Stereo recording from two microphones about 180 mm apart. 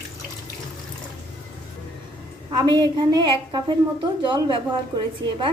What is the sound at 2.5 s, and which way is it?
A woman's voice, 25° right (ahead or behind).